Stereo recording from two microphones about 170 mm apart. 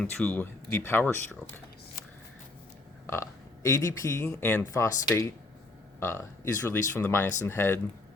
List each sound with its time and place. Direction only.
0.0 s speech: 5° left (ahead or behind)
3.1 s speech: 15° left (ahead or behind)